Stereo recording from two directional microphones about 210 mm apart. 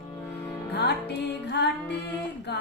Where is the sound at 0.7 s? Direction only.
50° left (ahead or behind).